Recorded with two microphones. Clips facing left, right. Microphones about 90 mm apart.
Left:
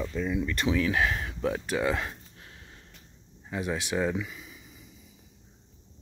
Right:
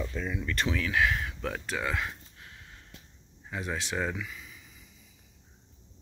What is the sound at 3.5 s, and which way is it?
Speech, 10° left (ahead or behind).